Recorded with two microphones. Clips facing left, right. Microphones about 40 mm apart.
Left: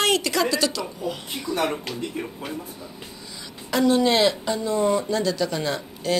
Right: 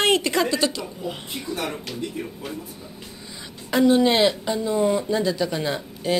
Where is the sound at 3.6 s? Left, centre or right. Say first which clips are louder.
Right 2 dB; centre.